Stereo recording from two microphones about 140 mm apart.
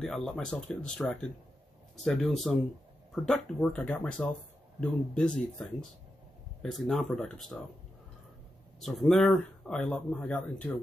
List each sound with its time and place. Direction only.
0.0 s a man's voice: centre (ahead or behind)
8.7 s a man's voice: centre (ahead or behind)